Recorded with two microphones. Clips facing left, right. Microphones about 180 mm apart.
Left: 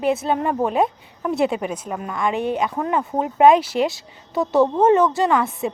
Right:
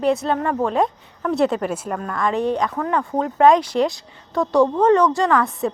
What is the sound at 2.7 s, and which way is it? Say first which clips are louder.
Speech: even; 15° left (ahead or behind).